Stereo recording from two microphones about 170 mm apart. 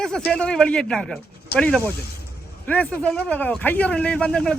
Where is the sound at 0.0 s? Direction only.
5° left (ahead or behind).